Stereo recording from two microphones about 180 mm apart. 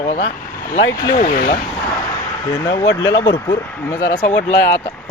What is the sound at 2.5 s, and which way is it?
Speech, 15° left (ahead or behind).